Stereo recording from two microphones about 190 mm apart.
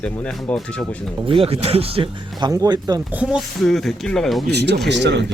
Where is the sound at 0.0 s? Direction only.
5° left (ahead or behind).